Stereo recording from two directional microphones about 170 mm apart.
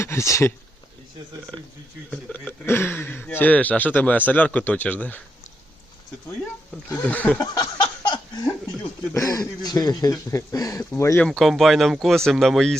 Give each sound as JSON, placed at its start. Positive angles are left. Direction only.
{"t": 0.0, "sound": "speech", "side_deg": 15}
{"t": 2.0, "sound": "speech", "side_deg": 10}
{"t": 6.8, "sound": "speech", "side_deg": 10}
{"t": 7.5, "sound": "a sound", "side_deg": 25}
{"t": 9.1, "sound": "speech", "side_deg": 20}
{"t": 11.3, "sound": "speech", "side_deg": 0}